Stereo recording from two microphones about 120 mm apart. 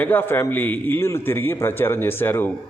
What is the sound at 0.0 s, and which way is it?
A man's voice, 15° left (ahead or behind).